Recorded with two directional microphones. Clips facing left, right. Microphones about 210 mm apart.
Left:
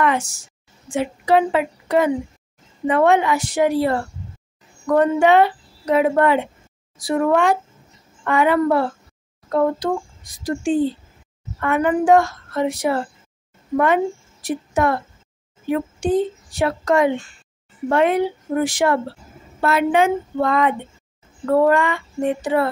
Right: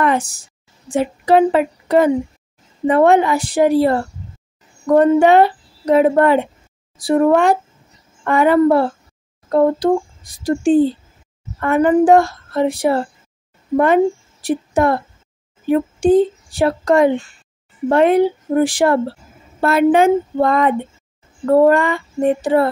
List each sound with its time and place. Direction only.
0.0 s a woman's voice: 35° right (ahead or behind)